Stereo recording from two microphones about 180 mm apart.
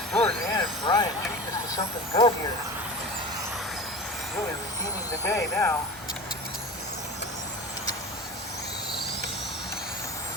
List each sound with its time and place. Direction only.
0.1 s vehicle: 5° left (ahead or behind)
0.5 s vehicle: 20° left (ahead or behind)
1.7 s speech: 25° left (ahead or behind)
5.2 s speech: 15° left (ahead or behind)